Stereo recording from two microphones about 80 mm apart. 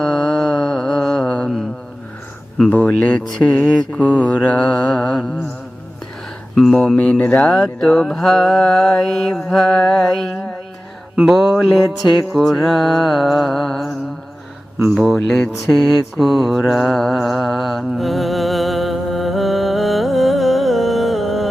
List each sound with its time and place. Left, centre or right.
0.0 s music: centre
1.3 s mantra: centre
2.6 s mantra: centre
6.6 s mantra: centre
6.9 s mantra: centre
7.4 s mantra: centre
14.9 s mantra: centre